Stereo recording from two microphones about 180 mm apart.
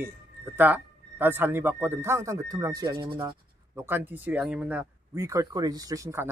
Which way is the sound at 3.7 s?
10° right (ahead or behind).